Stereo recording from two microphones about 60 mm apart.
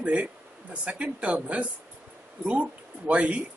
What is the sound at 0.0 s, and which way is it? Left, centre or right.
Speech, right.